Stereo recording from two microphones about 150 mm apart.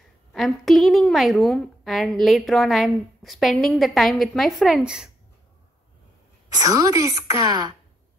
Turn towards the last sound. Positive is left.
turn(degrees=-25)  # may be behind; listen again after turning